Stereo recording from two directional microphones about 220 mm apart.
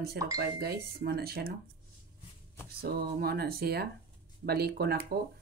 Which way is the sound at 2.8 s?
45° right (ahead or behind).